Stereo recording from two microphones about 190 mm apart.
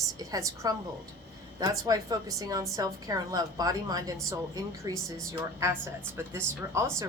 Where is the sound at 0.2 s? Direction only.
20° right (ahead or behind).